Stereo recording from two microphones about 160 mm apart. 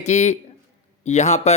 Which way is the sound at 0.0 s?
45° left (ahead or behind).